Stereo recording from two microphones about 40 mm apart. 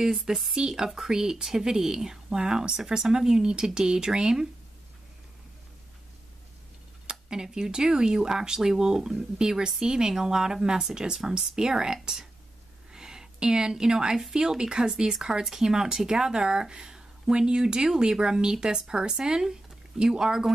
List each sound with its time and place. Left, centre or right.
0.0 s speech: centre
7.1 s speech: centre